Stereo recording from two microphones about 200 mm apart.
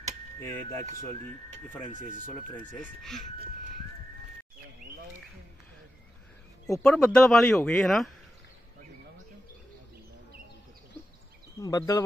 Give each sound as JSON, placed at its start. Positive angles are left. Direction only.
{"t": 0.4, "sound": "speech", "side_deg": 15}
{"t": 1.9, "sound": "speech", "side_deg": 40}
{"t": 2.8, "sound": "speech", "side_deg": 0}
{"t": 6.8, "sound": "speech", "side_deg": 5}
{"t": 11.6, "sound": "speech", "side_deg": 15}